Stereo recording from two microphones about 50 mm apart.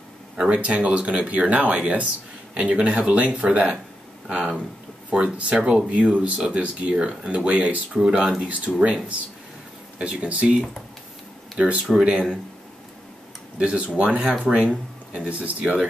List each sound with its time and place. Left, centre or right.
0.5 s speech: right
5.1 s speech: right
8.0 s speech: centre
9.9 s speech: right
11.5 s speech: right
13.6 s speech: right